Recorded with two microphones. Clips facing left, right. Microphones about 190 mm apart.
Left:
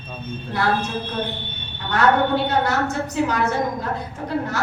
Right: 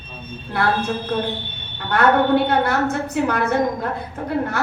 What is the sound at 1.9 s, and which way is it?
A woman's voice, 60° right (ahead or behind).